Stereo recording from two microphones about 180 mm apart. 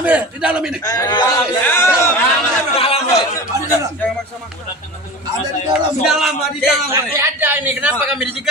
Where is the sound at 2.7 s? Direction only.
35° left (ahead or behind).